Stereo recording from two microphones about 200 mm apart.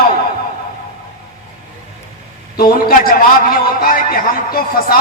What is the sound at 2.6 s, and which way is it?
A man's voice, 45° left (ahead or behind).